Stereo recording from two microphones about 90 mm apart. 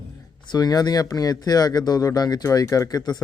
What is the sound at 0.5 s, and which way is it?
Speech, 45° left (ahead or behind).